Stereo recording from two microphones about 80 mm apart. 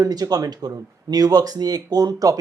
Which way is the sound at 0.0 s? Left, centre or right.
Right.